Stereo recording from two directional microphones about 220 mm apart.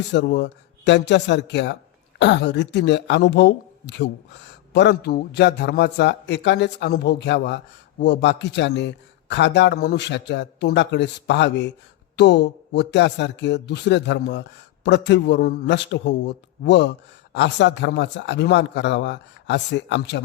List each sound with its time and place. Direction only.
0.1 s speech: 50° left (ahead or behind)